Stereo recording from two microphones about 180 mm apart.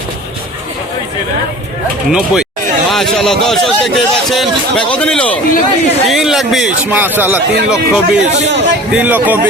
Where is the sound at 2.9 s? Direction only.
Centre (ahead or behind).